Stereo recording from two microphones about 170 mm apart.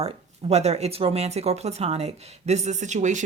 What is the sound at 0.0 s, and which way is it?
Speech, 40° right (ahead or behind).